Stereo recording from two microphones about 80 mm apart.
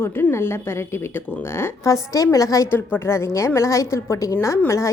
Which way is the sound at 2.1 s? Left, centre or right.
Left.